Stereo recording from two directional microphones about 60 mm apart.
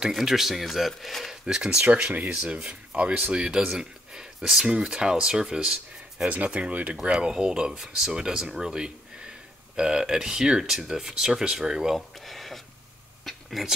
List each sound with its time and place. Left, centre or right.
0.0 s speech: centre
1.4 s speech: centre
1.9 s speech: right
6.2 s speech: right
7.0 s speech: centre
12.3 s a sound: centre